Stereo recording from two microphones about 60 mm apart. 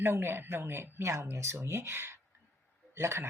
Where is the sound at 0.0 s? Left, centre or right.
Right.